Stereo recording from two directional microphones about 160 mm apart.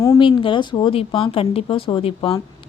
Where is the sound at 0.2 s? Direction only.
30° left (ahead or behind).